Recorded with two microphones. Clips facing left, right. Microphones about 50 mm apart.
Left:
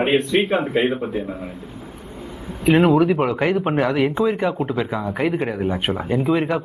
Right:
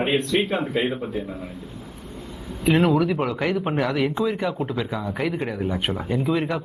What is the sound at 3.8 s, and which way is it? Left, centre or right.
Speech, centre.